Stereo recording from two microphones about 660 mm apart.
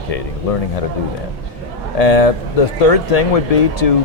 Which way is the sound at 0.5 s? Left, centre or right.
Left.